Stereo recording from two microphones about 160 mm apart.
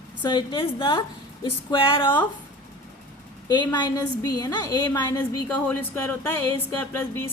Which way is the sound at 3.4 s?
25° left (ahead or behind).